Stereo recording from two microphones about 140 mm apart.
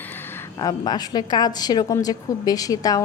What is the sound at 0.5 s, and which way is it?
Speech, 25° left (ahead or behind).